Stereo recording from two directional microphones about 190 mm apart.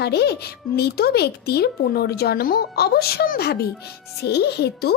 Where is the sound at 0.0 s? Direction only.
60° left (ahead or behind).